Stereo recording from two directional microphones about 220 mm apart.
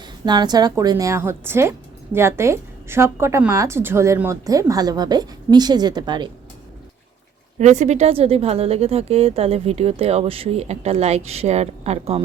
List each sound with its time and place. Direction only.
0.3 s a woman's voice: 20° right (ahead or behind)
7.6 s speech: 30° right (ahead or behind)